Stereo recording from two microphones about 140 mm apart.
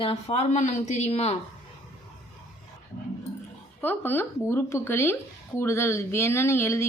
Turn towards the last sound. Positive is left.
turn(degrees=20)  # may be behind; listen again after turning